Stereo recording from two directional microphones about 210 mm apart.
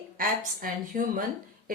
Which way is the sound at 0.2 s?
40° right (ahead or behind).